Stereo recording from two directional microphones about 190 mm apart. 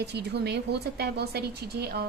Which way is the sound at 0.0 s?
60° right (ahead or behind).